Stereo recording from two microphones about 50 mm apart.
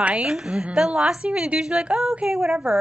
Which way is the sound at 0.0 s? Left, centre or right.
Right.